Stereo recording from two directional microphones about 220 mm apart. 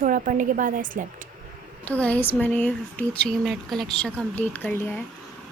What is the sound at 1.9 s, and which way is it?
Speech, 5° left (ahead or behind).